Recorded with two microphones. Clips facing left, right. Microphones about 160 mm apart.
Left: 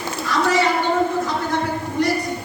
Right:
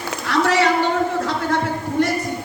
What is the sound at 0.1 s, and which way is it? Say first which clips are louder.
Clip-clop: right 1 dB; 70° right (ahead or behind).